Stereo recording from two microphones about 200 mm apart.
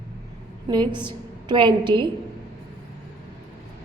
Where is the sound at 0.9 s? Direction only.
25° right (ahead or behind).